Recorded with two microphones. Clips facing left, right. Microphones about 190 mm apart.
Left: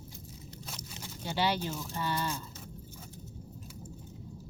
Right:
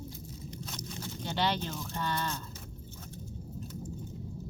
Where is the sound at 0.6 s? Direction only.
10° left (ahead or behind).